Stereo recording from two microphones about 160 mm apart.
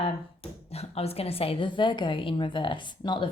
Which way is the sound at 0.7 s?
40° left (ahead or behind).